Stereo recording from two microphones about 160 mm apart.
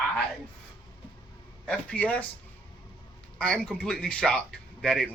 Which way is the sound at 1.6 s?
10° left (ahead or behind).